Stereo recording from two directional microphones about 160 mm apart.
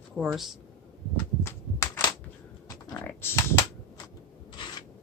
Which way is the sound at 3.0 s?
15° left (ahead or behind).